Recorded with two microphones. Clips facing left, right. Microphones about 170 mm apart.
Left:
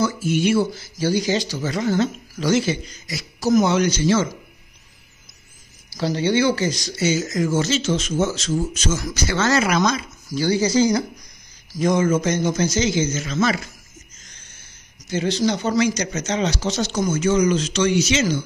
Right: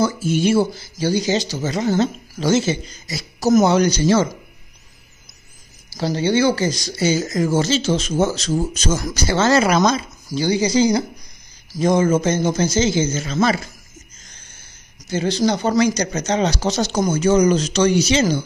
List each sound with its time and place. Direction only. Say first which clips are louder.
0.0 s a man's voice: right 2 dB; 30° right (ahead or behind)
5.9 s a man's voice: right 1 dB; 35° right (ahead or behind)
15.0 s speech: right 2 dB; 35° right (ahead or behind)